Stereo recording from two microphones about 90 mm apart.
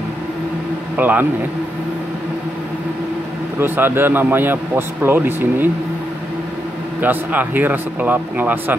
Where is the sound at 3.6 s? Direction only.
25° right (ahead or behind).